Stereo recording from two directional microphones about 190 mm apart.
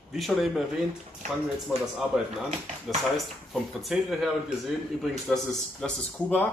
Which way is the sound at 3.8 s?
Centre (ahead or behind).